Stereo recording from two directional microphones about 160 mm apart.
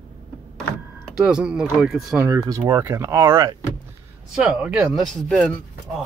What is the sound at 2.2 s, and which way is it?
Speech, 20° right (ahead or behind).